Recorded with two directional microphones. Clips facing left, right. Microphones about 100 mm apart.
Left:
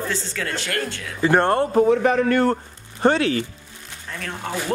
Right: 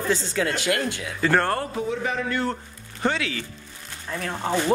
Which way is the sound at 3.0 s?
45° left (ahead or behind).